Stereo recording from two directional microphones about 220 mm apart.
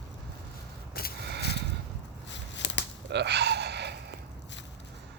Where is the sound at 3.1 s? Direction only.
50° right (ahead or behind).